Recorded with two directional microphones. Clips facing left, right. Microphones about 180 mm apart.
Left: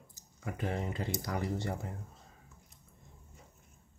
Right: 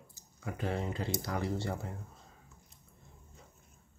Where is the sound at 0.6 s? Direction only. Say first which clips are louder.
Right 1 dB; 20° left (ahead or behind).